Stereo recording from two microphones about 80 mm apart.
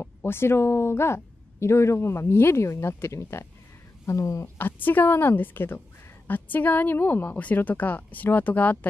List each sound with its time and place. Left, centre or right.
0.0 s speech: left
4.6 s speech: left